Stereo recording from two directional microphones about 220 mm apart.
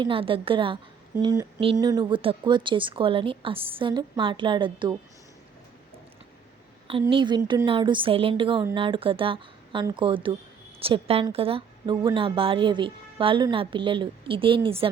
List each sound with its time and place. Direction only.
0.0 s a woman's voice: 25° right (ahead or behind)
7.1 s a woman's voice: 20° right (ahead or behind)